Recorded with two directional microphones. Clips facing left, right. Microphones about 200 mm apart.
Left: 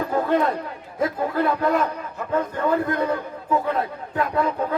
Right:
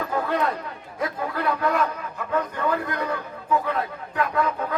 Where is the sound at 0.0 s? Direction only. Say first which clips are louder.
Left 4 dB; 35° left (ahead or behind).